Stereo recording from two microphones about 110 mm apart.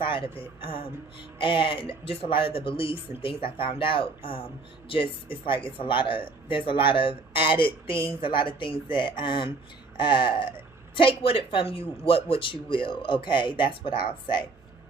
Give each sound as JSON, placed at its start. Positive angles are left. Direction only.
{"t": 0.0, "sound": "speech", "side_deg": 50}